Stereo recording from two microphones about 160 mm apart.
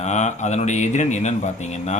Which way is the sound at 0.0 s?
45° left (ahead or behind).